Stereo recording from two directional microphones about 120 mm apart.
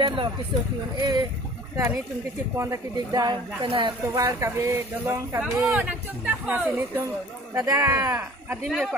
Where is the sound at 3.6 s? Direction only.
45° right (ahead or behind).